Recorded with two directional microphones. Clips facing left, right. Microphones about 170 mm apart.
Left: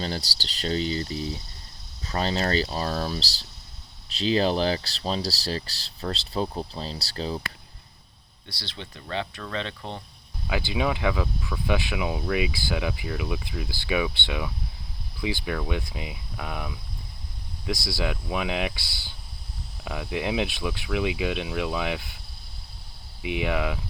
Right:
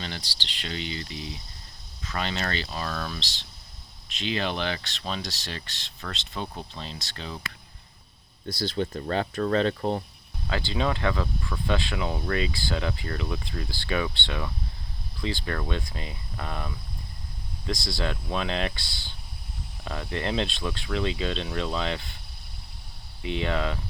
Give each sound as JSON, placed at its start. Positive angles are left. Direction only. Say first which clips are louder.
{"t": 0.0, "sound": "speech", "louder": "left 6 dB", "side_deg": 40}
{"t": 8.4, "sound": "speech", "louder": "right 12 dB", "side_deg": -45}
{"t": 10.4, "sound": "speech", "louder": "left 1 dB", "side_deg": 10}
{"t": 17.8, "sound": "speech", "louder": "left 1 dB", "side_deg": 10}
{"t": 18.9, "sound": "speech", "louder": "right 1 dB", "side_deg": -20}
{"t": 19.8, "sound": "speech", "louder": "left 2 dB", "side_deg": 5}
{"t": 23.2, "sound": "speech", "louder": "left 1 dB", "side_deg": 10}